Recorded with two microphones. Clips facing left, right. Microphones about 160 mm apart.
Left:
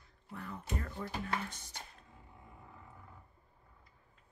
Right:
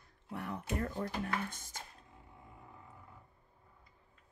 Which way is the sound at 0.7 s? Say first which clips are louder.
Right 4 dB; 55° right (ahead or behind).